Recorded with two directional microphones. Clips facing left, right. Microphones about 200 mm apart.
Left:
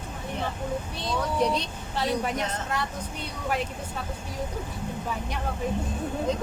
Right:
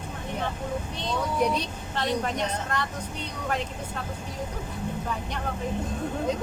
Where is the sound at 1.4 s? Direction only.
10° right (ahead or behind).